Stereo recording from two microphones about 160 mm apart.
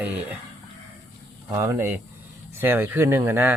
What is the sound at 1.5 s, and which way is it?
Speech, 15° right (ahead or behind).